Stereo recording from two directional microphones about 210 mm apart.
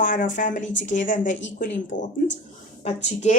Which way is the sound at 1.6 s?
60° left (ahead or behind).